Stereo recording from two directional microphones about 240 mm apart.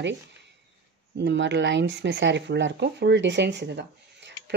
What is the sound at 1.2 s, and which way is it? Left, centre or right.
A woman's voice, right.